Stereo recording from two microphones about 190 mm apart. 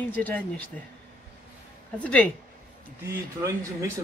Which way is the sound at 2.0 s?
10° left (ahead or behind).